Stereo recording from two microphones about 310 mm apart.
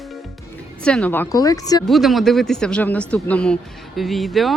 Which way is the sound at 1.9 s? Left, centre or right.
Centre.